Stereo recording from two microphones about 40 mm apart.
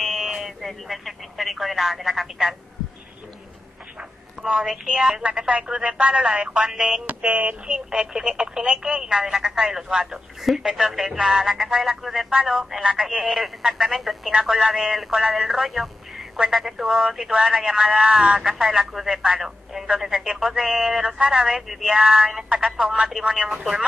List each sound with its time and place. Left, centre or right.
0.0 s a sound: centre
0.7 s speech: centre
4.4 s a woman's voice: centre
5.2 s speech: right
7.2 s a sound: right
7.6 s speech: right; by 22.9 s centre
23.0 s speech: centre